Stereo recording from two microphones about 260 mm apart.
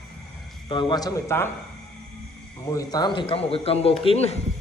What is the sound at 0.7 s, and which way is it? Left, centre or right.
Speech, centre.